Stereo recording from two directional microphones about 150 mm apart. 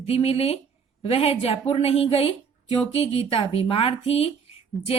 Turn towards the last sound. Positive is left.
turn(degrees=40)  # may be behind; listen again after turning